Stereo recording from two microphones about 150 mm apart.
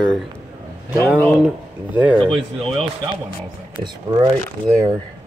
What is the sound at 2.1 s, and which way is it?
Speech, 5° left (ahead or behind).